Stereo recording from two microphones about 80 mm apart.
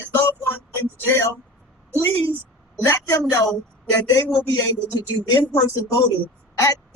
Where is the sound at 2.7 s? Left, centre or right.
Left.